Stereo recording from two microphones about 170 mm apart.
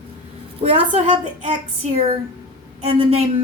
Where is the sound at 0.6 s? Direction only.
40° right (ahead or behind).